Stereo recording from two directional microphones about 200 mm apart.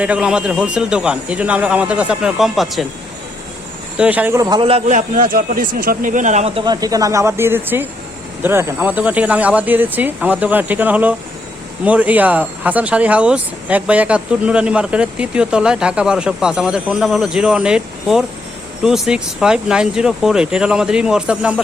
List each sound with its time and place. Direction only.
0.0 s speech: 5° right (ahead or behind)
3.9 s a man's voice: 5° right (ahead or behind)